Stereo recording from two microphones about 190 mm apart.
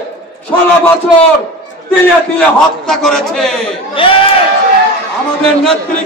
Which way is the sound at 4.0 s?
30° left (ahead or behind).